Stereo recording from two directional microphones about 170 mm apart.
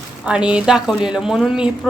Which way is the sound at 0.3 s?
5° right (ahead or behind).